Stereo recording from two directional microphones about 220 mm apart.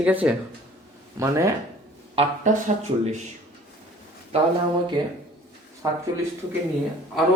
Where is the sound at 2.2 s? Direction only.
30° right (ahead or behind).